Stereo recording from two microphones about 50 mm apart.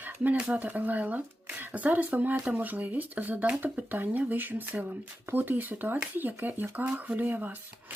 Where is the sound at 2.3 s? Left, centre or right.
Right.